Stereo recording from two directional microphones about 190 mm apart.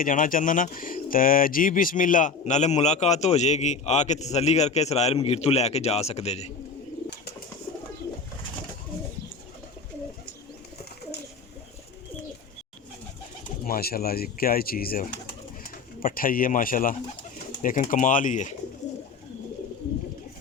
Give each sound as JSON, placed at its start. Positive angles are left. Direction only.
{"t": 0.0, "sound": "speech", "side_deg": 45}
{"t": 13.7, "sound": "speech", "side_deg": 50}
{"t": 17.3, "sound": "pigeon", "side_deg": 45}
{"t": 17.7, "sound": "speech", "side_deg": 40}